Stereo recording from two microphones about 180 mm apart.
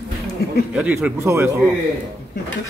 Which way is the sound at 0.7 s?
5° right (ahead or behind).